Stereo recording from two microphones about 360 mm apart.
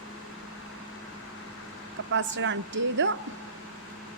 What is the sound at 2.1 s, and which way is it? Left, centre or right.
Speech, right.